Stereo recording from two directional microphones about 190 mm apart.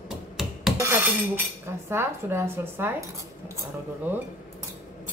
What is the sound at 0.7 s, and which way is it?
Dishes, 15° right (ahead or behind).